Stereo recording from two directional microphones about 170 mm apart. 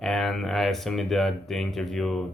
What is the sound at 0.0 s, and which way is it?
Speech, centre (ahead or behind).